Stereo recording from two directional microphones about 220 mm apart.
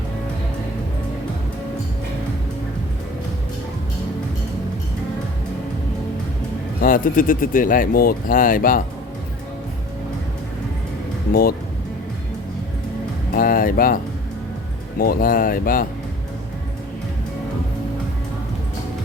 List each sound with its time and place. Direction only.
6.8 s speech: 40° left (ahead or behind)
11.3 s speech: 45° left (ahead or behind)
13.3 s music: 40° left (ahead or behind)
14.9 s speech: 40° left (ahead or behind)